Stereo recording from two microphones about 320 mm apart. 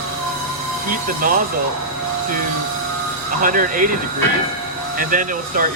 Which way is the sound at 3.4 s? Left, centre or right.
Right.